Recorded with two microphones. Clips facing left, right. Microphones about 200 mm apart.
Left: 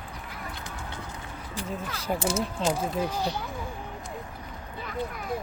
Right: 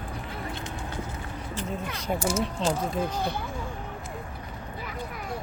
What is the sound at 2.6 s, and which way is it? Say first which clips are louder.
Speech: left 1 dB; 10° left (ahead or behind).